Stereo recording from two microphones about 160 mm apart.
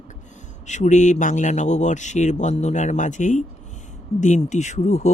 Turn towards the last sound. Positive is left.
turn(degrees=45)  # may be behind; listen again after turning